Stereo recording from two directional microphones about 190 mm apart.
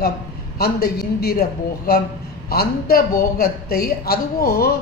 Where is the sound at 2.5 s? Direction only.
55° left (ahead or behind).